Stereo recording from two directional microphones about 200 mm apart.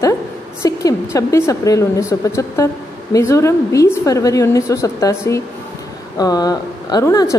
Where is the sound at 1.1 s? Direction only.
15° left (ahead or behind).